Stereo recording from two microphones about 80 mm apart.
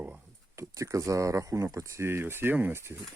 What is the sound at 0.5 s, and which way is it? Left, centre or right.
Speech, right.